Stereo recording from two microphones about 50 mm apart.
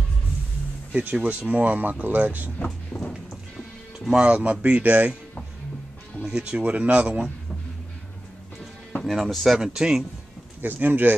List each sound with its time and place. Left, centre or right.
1.1 s speech: right
2.6 s speech: left
3.1 s music: centre
4.1 s speech: right
6.4 s speech: right
9.0 s speech: centre
9.8 s a man's voice: centre
10.6 s speech: right